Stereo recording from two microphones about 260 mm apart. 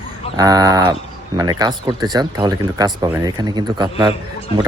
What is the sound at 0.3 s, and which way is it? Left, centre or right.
Speech, centre.